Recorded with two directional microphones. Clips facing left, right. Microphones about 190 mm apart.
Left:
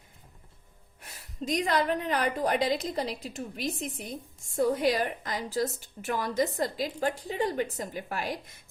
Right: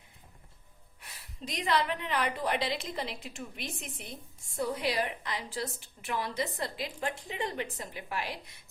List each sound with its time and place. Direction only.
1.0 s a woman's voice: 45° left (ahead or behind)